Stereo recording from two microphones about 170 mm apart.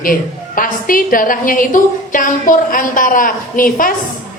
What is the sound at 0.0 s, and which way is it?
A woman's voice, 55° left (ahead or behind).